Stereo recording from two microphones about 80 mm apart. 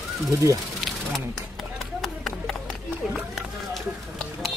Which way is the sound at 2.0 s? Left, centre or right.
Centre.